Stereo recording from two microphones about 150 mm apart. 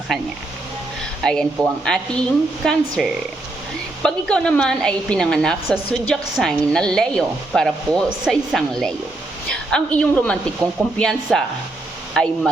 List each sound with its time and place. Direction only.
1.2 s a woman's voice: 5° left (ahead or behind)
10.6 s speech: 25° right (ahead or behind)
10.9 s a woman's voice: 5° left (ahead or behind)